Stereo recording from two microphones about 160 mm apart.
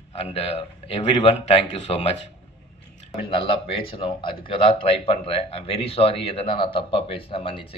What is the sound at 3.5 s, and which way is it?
A man's voice, 35° left (ahead or behind).